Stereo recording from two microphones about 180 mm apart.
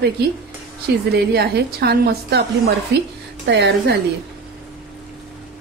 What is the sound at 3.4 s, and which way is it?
Speech, 70° right (ahead or behind).